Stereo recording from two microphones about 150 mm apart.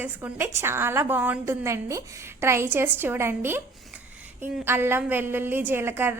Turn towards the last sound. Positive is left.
turn(degrees=-15)  # may be behind; listen again after turning